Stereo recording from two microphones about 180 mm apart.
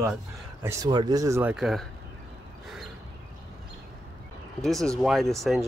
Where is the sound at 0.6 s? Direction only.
20° right (ahead or behind).